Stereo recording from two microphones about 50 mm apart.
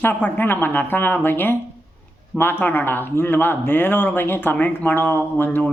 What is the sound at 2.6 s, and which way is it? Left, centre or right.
A man's voice, left.